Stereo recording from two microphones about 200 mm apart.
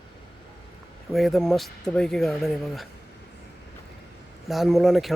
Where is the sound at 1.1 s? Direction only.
Centre (ahead or behind).